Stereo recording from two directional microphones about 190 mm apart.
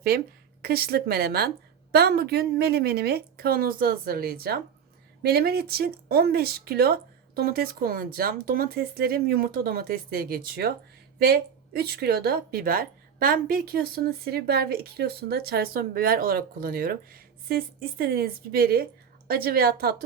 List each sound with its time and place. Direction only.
0.6 s a woman's voice: 55° right (ahead or behind)